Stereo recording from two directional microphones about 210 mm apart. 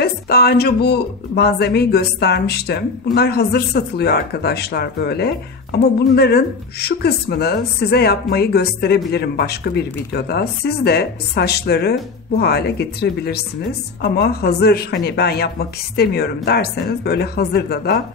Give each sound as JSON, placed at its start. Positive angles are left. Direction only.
{"t": 0.0, "sound": "speech", "side_deg": 45}